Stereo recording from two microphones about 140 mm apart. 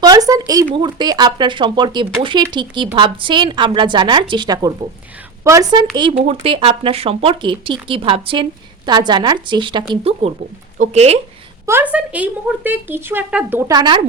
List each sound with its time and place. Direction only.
0.0 s a woman's voice: 25° right (ahead or behind)
6.1 s a woman's voice: 45° right (ahead or behind)
11.6 s speech: 15° right (ahead or behind)
13.7 s a woman's voice: 30° right (ahead or behind)